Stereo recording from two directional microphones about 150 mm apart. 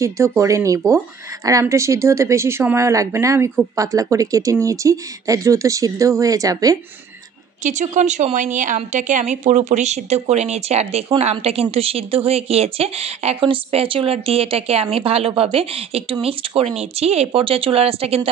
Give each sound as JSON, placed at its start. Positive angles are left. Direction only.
{"t": 0.0, "sound": "speech", "side_deg": -20}
{"t": 7.6, "sound": "a woman's voice", "side_deg": -55}